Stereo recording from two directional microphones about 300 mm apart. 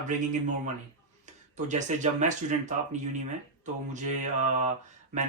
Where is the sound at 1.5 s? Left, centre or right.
Right.